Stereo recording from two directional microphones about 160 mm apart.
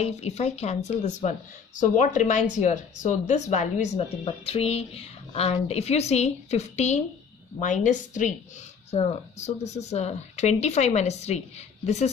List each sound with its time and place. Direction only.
0.0 s a woman's voice: 40° left (ahead or behind)
8.9 s speech: 40° left (ahead or behind)